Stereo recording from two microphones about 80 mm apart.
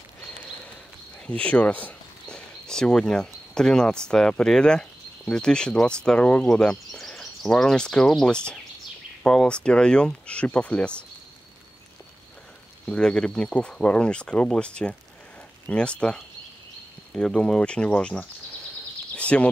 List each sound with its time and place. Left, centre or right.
1.2 s speech: centre
12.8 s speech: centre
19.1 s a sound: centre